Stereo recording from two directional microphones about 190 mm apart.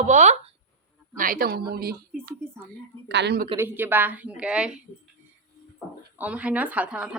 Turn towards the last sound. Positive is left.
turn(degrees=-5)  # may be behind; listen again after turning